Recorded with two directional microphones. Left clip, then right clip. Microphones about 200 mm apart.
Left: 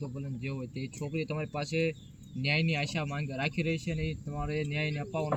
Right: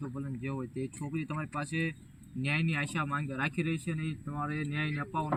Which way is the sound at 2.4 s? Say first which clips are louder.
Left 2 dB; 15° left (ahead or behind).